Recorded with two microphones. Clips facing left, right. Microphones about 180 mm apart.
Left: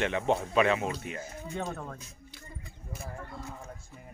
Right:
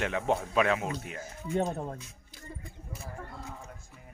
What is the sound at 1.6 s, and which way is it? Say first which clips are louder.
Speech: right 6 dB; 30° right (ahead or behind).